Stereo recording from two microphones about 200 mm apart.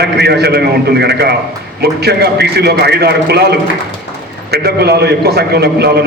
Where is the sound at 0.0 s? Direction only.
55° right (ahead or behind).